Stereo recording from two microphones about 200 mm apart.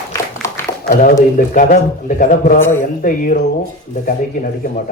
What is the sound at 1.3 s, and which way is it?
Speech, 45° left (ahead or behind).